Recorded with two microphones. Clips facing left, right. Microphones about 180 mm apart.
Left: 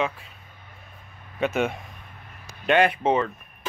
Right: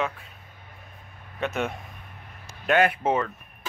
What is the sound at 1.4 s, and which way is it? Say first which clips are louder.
Speech: left 4 dB; centre (ahead or behind).